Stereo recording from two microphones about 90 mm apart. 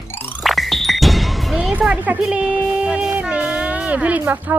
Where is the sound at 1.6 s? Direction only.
10° right (ahead or behind).